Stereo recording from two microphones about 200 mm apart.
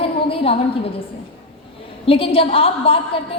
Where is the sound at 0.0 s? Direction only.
30° left (ahead or behind).